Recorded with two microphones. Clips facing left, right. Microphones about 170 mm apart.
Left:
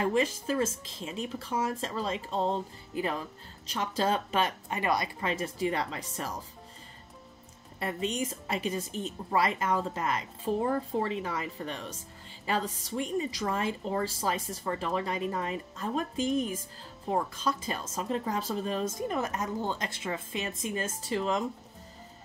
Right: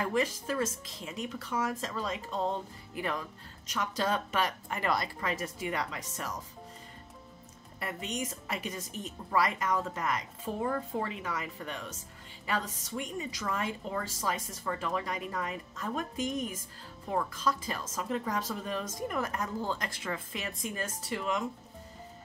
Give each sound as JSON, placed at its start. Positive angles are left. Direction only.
{"t": 0.0, "sound": "speech", "side_deg": 25}
{"t": 7.8, "sound": "speech", "side_deg": 30}